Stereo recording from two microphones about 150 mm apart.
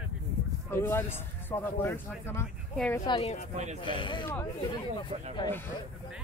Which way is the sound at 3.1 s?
40° left (ahead or behind).